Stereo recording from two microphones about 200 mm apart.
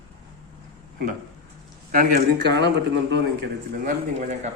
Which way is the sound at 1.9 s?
45° right (ahead or behind).